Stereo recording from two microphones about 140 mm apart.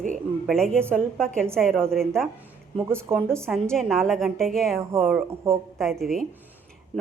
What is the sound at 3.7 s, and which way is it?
Speech, centre (ahead or behind).